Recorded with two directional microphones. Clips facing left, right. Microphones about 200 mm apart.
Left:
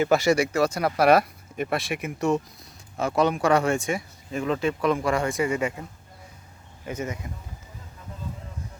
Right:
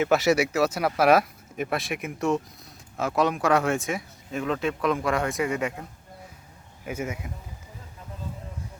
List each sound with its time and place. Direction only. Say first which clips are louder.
0.0 s speech: left 1 dB; centre (ahead or behind)
6.8 s speech: even; 10° right (ahead or behind)